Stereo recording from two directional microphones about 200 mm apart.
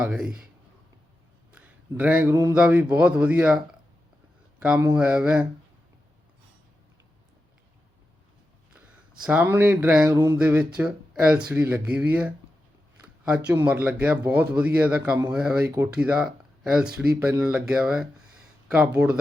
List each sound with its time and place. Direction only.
0.0 s speech: 5° right (ahead or behind)
1.5 s speech: 10° right (ahead or behind)
4.6 s speech: 10° right (ahead or behind)
9.2 s speech: 10° right (ahead or behind)
13.5 s speech: 10° right (ahead or behind)